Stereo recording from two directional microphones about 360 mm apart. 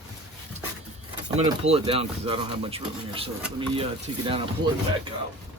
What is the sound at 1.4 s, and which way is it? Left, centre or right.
Speech, centre.